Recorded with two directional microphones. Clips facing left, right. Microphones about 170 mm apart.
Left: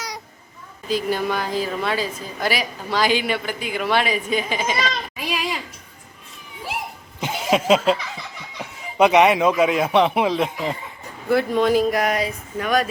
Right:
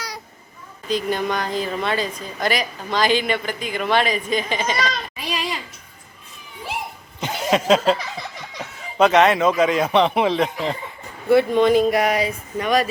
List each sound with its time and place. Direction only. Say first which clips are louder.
0.9 s a woman's voice: even; 5° left (ahead or behind)
7.2 s a sound: even; 5° left (ahead or behind)
8.5 s speech: even; 10° left (ahead or behind)